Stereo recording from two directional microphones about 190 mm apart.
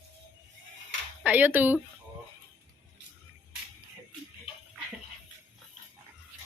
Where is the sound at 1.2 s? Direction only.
10° right (ahead or behind).